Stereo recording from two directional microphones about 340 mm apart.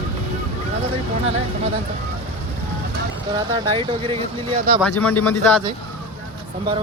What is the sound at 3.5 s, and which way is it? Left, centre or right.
Speech, centre.